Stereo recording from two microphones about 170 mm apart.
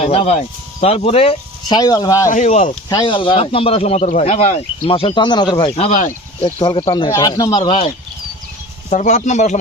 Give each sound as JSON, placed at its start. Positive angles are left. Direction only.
{"t": 0.0, "sound": "speech", "side_deg": 35}
{"t": 2.3, "sound": "speech", "side_deg": 45}
{"t": 2.9, "sound": "speech", "side_deg": 30}
{"t": 8.9, "sound": "speech", "side_deg": 45}